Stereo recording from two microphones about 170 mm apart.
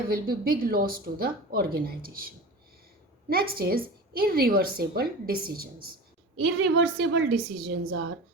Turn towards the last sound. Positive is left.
turn(degrees=-75)  # may be behind; listen again after turning